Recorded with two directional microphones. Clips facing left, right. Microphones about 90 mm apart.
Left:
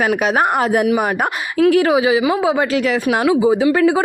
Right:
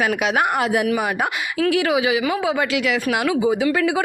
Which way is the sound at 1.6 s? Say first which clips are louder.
Left 6 dB; 35° left (ahead or behind).